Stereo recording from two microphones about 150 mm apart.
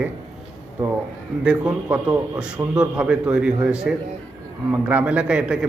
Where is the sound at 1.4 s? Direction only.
10° right (ahead or behind).